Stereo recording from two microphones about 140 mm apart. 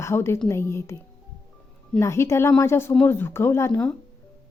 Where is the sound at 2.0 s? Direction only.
20° left (ahead or behind).